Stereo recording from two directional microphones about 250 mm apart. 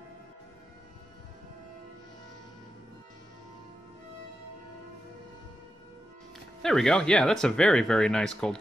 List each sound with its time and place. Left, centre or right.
6.6 s speech: centre